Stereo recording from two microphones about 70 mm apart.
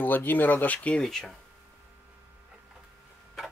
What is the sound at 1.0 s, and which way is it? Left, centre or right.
Speech, centre.